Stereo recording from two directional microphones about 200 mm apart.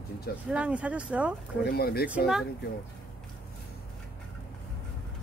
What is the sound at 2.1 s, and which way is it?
Speech, 5° right (ahead or behind).